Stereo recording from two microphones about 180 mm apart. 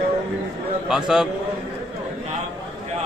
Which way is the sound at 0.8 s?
5° right (ahead or behind).